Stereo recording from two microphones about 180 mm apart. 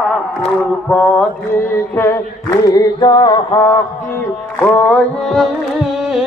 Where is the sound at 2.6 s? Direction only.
20° left (ahead or behind).